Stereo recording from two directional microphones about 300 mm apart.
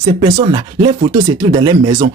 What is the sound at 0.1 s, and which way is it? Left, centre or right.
Speech, centre.